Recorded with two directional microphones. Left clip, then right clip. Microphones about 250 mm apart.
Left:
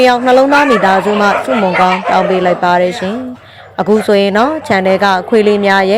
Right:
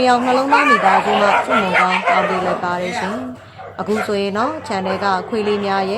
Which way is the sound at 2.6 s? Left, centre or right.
Left.